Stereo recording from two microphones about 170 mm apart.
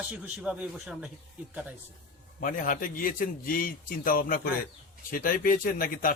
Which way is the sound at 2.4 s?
55° left (ahead or behind).